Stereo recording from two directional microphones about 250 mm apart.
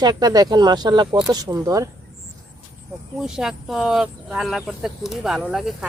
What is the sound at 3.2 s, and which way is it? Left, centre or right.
Speech, centre.